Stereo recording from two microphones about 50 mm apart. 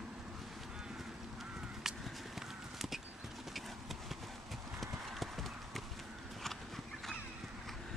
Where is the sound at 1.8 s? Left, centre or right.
Centre.